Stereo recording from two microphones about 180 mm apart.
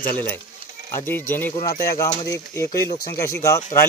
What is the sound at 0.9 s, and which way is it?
Speech, 15° left (ahead or behind).